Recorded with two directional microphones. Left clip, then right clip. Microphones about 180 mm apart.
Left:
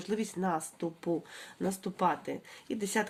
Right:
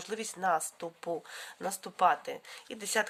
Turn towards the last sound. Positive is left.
turn(degrees=-30)  # may be behind; listen again after turning